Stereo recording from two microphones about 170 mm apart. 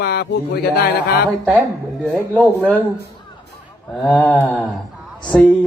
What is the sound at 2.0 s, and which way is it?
Speech, 5° left (ahead or behind).